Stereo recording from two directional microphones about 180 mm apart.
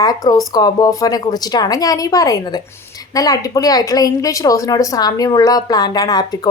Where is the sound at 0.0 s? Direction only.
20° left (ahead or behind).